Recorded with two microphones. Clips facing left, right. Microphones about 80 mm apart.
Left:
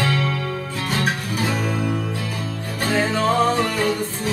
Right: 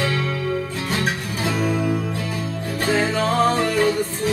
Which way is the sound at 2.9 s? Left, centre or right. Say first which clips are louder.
Left 1 dB; centre.